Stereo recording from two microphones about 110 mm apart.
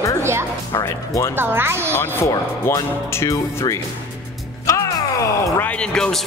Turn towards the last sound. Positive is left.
turn(degrees=5)  # may be behind; listen again after turning